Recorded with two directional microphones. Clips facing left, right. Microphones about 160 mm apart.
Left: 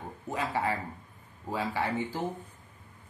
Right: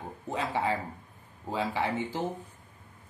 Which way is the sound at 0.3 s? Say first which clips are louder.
Right 1 dB; 20° right (ahead or behind).